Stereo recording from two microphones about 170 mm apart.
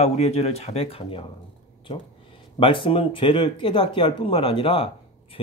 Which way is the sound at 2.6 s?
30° left (ahead or behind).